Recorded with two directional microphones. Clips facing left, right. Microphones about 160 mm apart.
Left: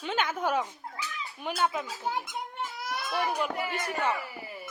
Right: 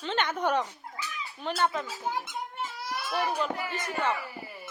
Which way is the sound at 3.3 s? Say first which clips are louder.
Even; 15° left (ahead or behind).